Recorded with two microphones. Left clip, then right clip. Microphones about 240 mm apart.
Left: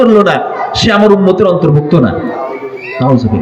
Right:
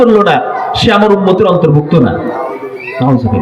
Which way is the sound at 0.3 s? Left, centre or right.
Left.